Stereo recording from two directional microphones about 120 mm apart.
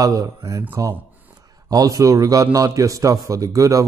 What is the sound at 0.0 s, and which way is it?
A man's voice, 30° right (ahead or behind).